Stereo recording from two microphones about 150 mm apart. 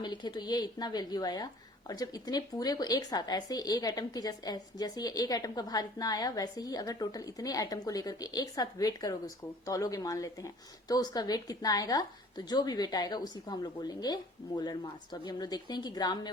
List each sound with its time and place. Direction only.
0.0 s speech: 30° left (ahead or behind)